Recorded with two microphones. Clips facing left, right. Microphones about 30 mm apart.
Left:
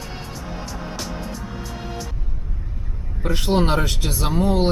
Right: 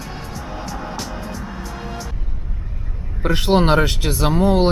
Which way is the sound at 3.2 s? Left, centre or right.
Right.